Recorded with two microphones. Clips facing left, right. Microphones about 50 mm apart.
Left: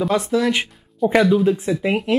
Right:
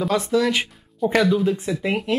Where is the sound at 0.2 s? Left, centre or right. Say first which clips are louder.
Left 1 dB; centre.